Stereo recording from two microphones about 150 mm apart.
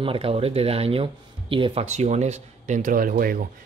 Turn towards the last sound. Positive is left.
turn(degrees=-70)  # may be behind; listen again after turning